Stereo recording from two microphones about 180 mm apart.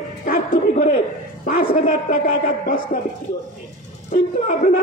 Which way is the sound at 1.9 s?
50° left (ahead or behind).